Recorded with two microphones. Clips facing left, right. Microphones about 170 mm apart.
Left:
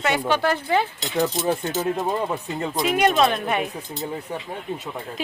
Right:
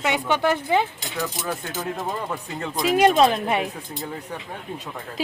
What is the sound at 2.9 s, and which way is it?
Speech, 30° right (ahead or behind).